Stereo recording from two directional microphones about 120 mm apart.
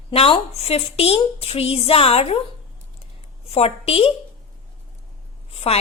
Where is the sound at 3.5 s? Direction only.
60° left (ahead or behind).